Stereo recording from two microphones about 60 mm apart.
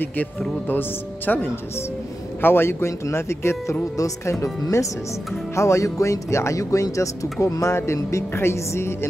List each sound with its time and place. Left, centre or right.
0.7 s speech: left
3.9 s speech: left